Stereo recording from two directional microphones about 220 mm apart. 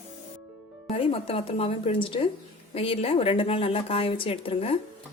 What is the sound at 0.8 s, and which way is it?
A woman's voice, 25° left (ahead or behind).